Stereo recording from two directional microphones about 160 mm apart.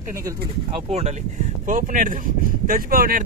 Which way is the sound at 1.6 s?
55° right (ahead or behind).